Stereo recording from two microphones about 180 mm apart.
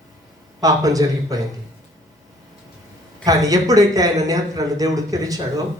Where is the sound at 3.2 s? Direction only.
20° right (ahead or behind).